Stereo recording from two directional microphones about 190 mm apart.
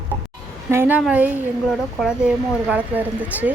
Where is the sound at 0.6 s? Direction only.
10° right (ahead or behind).